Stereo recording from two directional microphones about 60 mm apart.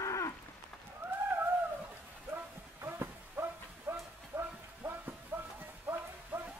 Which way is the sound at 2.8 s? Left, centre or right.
Right.